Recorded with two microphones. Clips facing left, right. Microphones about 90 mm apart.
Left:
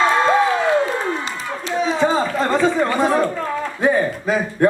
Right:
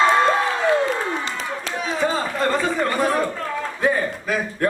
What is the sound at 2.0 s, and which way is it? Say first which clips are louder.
Chatter: left 2 dB; 20° left (ahead or behind).